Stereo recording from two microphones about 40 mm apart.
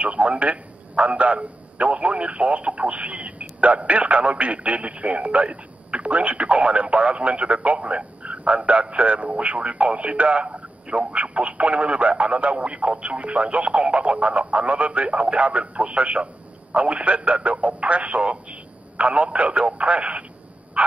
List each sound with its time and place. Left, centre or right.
0.0 s a man's voice: right
20.8 s bow-wow: right